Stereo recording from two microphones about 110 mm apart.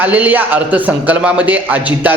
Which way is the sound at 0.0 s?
15° right (ahead or behind).